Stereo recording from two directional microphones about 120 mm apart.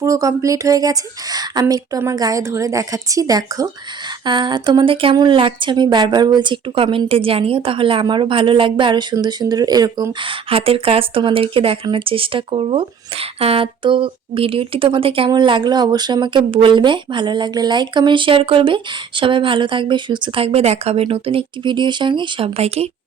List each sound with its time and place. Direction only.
0.0 s speech: 25° right (ahead or behind); by 22.9 s 60° right (ahead or behind)